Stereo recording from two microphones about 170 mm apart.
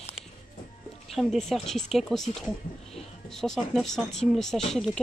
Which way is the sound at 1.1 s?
Centre (ahead or behind).